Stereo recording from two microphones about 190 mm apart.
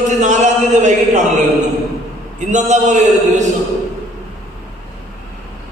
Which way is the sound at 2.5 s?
40° right (ahead or behind).